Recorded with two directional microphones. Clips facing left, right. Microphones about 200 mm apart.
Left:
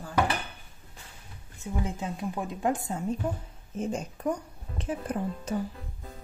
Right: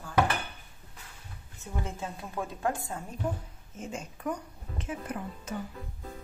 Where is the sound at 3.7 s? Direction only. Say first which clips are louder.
Left 7 dB; 35° left (ahead or behind).